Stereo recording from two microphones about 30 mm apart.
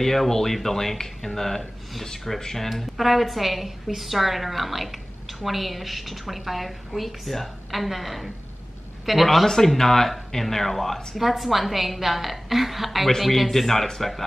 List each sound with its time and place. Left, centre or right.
0.0 s speech: centre
2.7 s a woman's voice: centre
9.5 s speech: centre
11.1 s a woman's voice: centre